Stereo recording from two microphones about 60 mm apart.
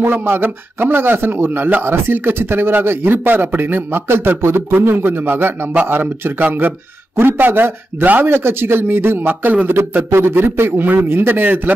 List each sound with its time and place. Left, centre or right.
0.1 s a man's voice: right